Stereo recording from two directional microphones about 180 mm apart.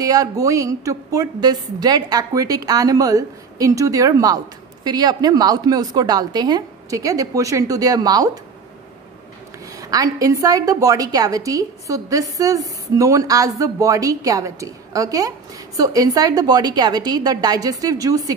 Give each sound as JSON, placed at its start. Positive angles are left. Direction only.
{"t": 0.0, "sound": "a woman's voice", "side_deg": -20}
{"t": 9.8, "sound": "a woman's voice", "side_deg": -20}